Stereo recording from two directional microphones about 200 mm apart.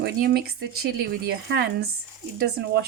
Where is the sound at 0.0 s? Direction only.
50° right (ahead or behind).